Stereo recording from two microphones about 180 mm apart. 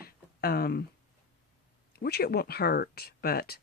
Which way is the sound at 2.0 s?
60° left (ahead or behind).